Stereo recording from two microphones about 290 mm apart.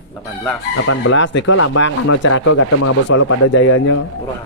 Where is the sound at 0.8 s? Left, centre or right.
Left.